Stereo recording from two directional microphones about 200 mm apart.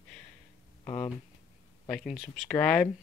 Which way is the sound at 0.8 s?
30° left (ahead or behind).